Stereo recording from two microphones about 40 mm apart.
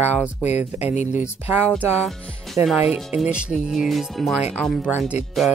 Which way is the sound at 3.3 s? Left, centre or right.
Right.